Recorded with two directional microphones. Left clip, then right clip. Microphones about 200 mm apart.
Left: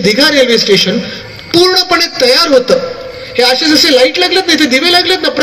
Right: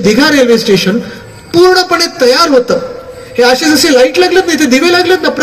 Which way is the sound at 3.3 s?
70° right (ahead or behind).